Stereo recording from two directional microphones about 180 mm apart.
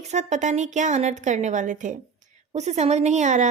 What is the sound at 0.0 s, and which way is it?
A woman's voice, 40° right (ahead or behind).